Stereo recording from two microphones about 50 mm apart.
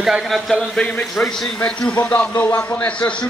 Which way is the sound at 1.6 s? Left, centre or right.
Left.